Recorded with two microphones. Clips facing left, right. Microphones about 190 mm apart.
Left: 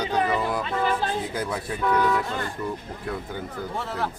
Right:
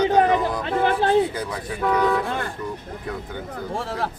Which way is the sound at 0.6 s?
60° right (ahead or behind).